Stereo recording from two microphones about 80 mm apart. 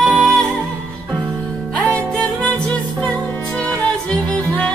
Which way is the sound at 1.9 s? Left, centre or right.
Centre.